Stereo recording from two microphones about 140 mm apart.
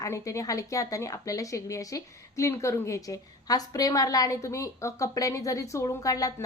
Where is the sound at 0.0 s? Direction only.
25° left (ahead or behind).